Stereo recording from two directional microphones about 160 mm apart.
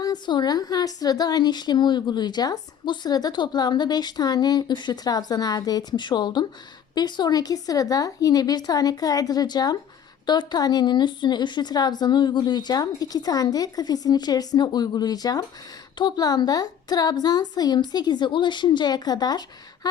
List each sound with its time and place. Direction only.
0.0 s a woman's voice: 25° left (ahead or behind)